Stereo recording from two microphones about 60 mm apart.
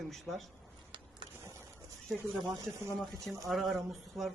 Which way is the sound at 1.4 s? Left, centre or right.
Right.